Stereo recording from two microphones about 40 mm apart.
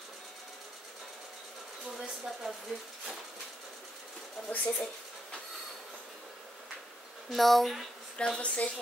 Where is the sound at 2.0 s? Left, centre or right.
Centre.